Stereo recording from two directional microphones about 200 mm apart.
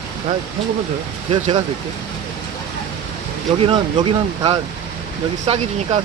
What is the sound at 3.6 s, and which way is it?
Speech, 25° right (ahead or behind).